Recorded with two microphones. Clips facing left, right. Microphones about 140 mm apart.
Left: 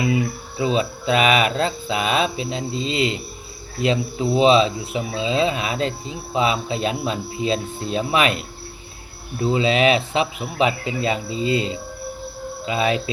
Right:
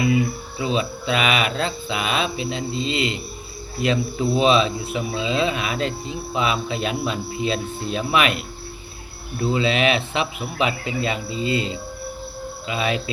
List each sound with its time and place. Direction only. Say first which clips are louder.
0.0 s speech: right 1 dB; 30° left (ahead or behind)
3.8 s speech: left 1 dB; 25° left (ahead or behind)